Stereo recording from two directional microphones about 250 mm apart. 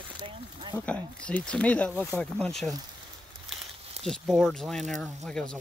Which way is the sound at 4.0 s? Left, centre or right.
Centre.